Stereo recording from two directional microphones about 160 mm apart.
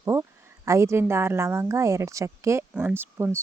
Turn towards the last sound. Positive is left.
turn(degrees=-15)  # may be behind; listen again after turning